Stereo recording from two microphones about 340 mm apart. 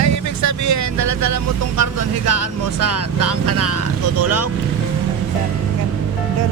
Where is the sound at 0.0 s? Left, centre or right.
Right.